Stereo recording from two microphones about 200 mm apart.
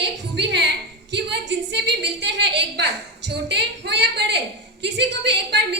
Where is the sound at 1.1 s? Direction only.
60° right (ahead or behind).